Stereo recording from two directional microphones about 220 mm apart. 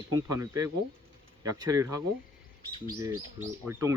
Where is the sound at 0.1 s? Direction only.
15° right (ahead or behind).